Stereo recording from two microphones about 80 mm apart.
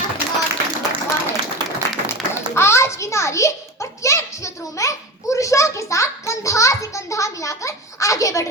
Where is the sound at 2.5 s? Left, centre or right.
Left.